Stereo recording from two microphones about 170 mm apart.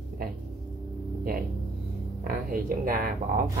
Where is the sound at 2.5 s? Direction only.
55° right (ahead or behind).